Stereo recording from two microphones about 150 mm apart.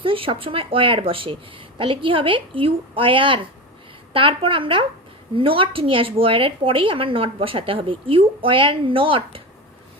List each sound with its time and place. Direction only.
0.0 s a woman's voice: 35° right (ahead or behind)